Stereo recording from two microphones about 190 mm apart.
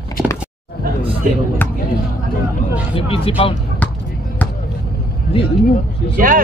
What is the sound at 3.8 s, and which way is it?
Basketball bounce, 10° left (ahead or behind).